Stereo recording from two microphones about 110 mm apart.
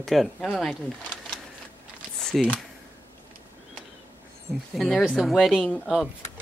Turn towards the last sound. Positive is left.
turn(degrees=10)  # may be behind; listen again after turning